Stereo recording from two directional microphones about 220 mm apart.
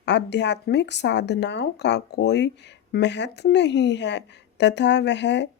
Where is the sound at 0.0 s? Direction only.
50° left (ahead or behind).